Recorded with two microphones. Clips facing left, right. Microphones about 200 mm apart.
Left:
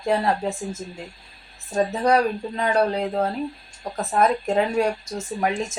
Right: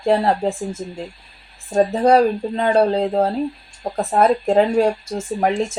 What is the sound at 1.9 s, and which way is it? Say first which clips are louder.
Speech: right 5 dB; 30° right (ahead or behind).